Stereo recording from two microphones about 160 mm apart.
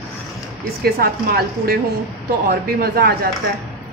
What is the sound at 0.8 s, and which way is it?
A woman's voice, 70° right (ahead or behind).